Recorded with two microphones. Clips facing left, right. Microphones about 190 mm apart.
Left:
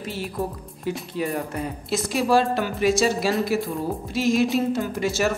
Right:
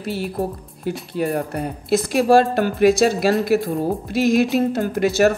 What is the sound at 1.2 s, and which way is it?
Speech, 55° right (ahead or behind).